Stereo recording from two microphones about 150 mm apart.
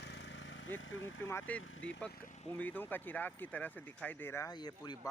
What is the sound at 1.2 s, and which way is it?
Speech, 15° left (ahead or behind).